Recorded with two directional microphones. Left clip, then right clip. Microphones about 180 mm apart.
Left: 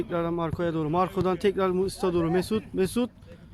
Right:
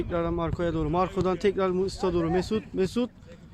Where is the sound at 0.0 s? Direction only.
15° left (ahead or behind).